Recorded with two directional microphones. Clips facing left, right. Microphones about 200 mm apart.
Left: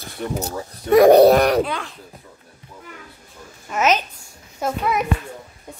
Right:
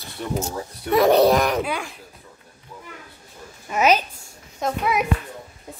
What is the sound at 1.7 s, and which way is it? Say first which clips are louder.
Speech: even; 10° right (ahead or behind).